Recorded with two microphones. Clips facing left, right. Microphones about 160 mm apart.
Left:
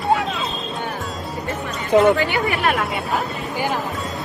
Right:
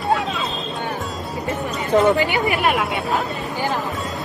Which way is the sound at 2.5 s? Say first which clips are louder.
Right 1 dB; centre (ahead or behind).